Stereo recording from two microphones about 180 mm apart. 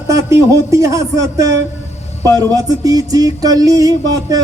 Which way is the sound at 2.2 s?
20° right (ahead or behind).